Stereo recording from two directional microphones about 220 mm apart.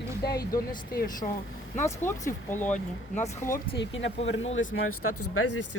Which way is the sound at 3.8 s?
55° left (ahead or behind).